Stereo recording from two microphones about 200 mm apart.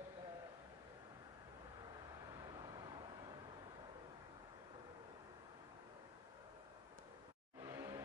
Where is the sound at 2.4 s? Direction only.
20° right (ahead or behind).